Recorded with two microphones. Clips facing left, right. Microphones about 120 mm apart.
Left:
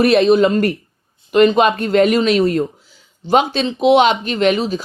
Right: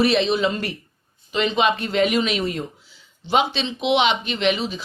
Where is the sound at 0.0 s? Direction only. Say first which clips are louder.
Left 7 dB; 50° left (ahead or behind).